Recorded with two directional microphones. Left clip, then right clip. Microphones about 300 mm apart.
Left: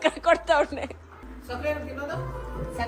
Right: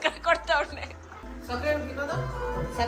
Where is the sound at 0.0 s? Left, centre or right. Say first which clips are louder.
Left 3 dB; left.